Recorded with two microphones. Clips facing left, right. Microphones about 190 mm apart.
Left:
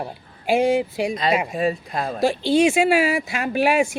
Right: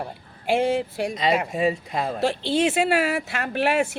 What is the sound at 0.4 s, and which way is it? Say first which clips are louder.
Speech: left 3 dB; 10° left (ahead or behind).